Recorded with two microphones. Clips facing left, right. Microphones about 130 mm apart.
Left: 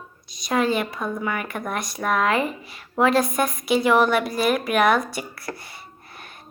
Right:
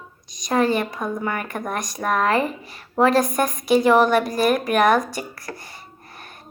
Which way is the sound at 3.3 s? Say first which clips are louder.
Right 3 dB; 45° right (ahead or behind).